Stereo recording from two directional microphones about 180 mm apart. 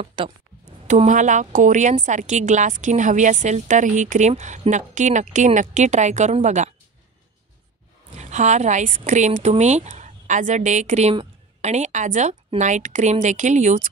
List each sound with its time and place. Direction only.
0.0 s speech: 30° right (ahead or behind)
0.8 s a woman's voice: 40° right (ahead or behind)
8.2 s a woman's voice: 40° right (ahead or behind)